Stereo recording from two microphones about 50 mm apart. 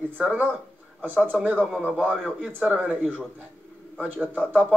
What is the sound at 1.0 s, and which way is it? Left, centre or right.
A man's voice, right.